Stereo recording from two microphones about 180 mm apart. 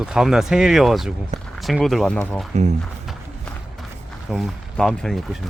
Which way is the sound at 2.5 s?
40° right (ahead or behind).